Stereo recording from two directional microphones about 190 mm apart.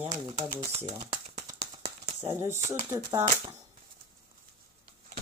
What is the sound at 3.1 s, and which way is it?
Speech, 30° right (ahead or behind).